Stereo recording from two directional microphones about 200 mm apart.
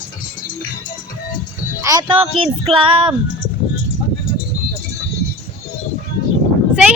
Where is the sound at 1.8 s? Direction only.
20° right (ahead or behind).